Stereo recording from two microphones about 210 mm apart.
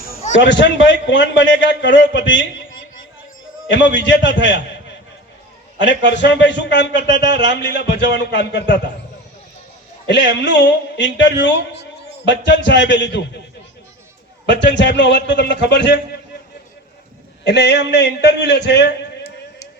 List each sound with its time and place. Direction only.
0.3 s a man's voice: 60° left (ahead or behind)
3.7 s a man's voice: 60° left (ahead or behind)
5.8 s a man's voice: 55° left (ahead or behind)
10.1 s a man's voice: 60° left (ahead or behind)
14.4 s a man's voice: 55° left (ahead or behind)
17.4 s a man's voice: 55° left (ahead or behind)